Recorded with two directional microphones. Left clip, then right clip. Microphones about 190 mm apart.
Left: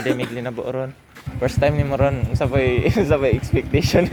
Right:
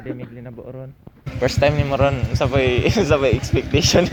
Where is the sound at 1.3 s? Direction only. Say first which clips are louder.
Right 2 dB; 5° left (ahead or behind).